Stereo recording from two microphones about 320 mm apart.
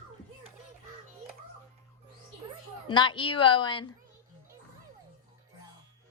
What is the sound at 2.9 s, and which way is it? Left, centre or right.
Speech, centre.